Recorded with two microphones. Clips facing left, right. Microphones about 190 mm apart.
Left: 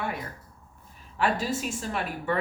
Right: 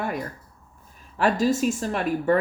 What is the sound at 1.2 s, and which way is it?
A woman's voice, 45° right (ahead or behind).